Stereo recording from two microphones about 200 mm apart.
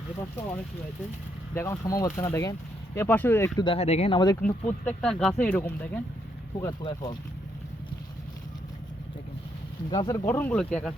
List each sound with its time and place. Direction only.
1.5 s speech: 15° left (ahead or behind)
3.6 s speech: 30° left (ahead or behind)
4.4 s speech: 5° left (ahead or behind); by 7.2 s 20° left (ahead or behind)
9.9 s speech: 20° left (ahead or behind); by 10.9 s 5° left (ahead or behind)